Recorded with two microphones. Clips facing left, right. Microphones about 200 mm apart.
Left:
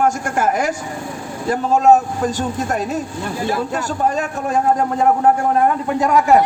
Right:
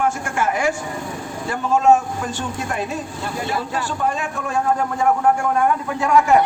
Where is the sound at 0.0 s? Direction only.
40° left (ahead or behind).